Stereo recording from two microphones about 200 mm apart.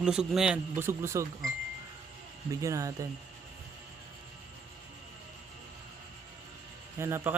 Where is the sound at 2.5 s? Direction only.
15° right (ahead or behind).